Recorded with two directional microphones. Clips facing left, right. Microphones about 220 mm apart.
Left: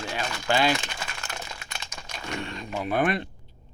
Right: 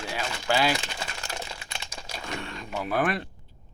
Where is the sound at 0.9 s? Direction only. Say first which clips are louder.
Right 1 dB; 30° right (ahead or behind).